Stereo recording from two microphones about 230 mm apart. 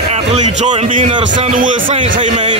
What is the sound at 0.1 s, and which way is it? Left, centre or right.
A man's voice, right.